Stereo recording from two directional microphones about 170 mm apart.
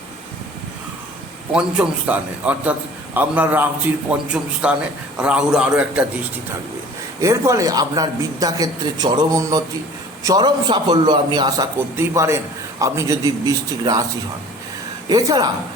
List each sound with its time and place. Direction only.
1.5 s a man's voice: 5° right (ahead or behind)
7.2 s speech: 20° right (ahead or behind)
15.1 s speech: 20° right (ahead or behind)